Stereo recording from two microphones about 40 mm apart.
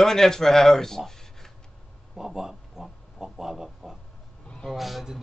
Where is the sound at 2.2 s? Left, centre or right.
Centre.